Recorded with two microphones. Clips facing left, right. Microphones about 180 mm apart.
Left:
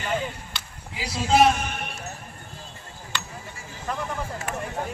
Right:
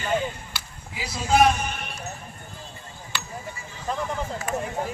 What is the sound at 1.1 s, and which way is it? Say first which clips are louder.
Speech: left 1 dB; 5° left (ahead or behind).